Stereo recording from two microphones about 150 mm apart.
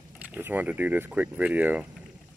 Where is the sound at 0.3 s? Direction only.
10° right (ahead or behind).